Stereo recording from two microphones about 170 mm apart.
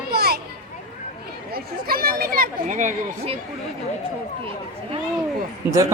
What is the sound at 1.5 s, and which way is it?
Speech, 60° right (ahead or behind).